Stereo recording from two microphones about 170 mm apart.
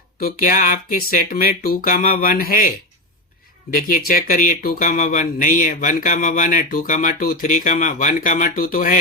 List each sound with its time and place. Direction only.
0.2 s speech: 55° left (ahead or behind)